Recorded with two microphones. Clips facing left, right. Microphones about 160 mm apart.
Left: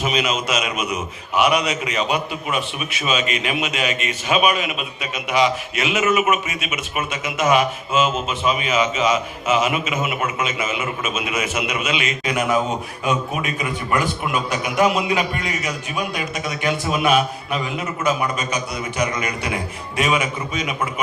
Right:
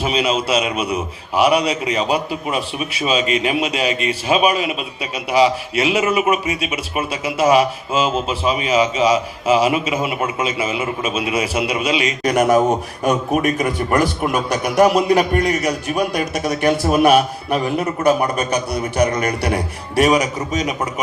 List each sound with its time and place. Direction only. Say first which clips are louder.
0.0 s a man's voice: right 3 dB; 30° right (ahead or behind)